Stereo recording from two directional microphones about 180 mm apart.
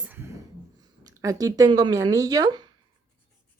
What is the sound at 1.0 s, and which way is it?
Speech, 20° right (ahead or behind).